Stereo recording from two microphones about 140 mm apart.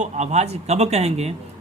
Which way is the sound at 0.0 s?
55° right (ahead or behind).